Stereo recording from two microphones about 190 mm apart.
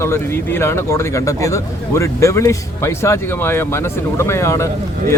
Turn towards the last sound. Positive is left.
turn(degrees=15)  # may be behind; listen again after turning